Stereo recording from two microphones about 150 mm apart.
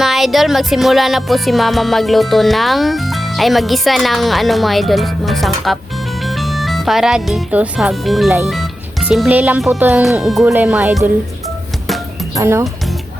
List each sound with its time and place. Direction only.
0.0 s music: centre (ahead or behind)
6.2 s speech: centre (ahead or behind)
10.4 s speech: 15° right (ahead or behind)
12.4 s speech: 20° right (ahead or behind)